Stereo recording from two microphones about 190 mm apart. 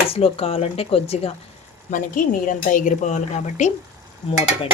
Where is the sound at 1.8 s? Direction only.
45° left (ahead or behind).